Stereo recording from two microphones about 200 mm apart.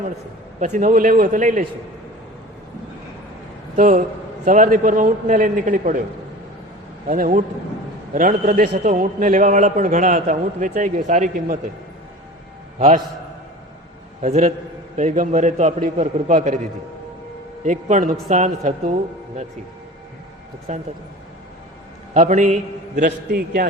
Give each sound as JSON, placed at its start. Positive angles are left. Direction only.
{"t": 0.6, "sound": "a man's voice", "side_deg": -40}
{"t": 3.8, "sound": "a man's voice", "side_deg": -40}
{"t": 7.1, "sound": "a man's voice", "side_deg": -40}
{"t": 14.2, "sound": "a man's voice", "side_deg": -35}
{"t": 17.7, "sound": "a man's voice", "side_deg": -40}
{"t": 20.7, "sound": "a man's voice", "side_deg": -35}
{"t": 22.1, "sound": "a man's voice", "side_deg": -40}